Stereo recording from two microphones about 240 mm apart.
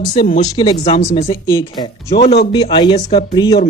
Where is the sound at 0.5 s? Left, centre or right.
Centre.